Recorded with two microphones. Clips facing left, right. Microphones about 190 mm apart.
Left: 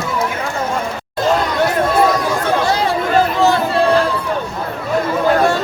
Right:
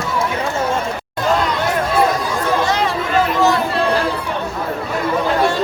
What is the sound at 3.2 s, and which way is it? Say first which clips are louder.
Chatter: left 1 dB; 30° left (ahead or behind).